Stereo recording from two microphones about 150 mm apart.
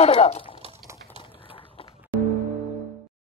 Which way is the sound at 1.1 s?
35° left (ahead or behind).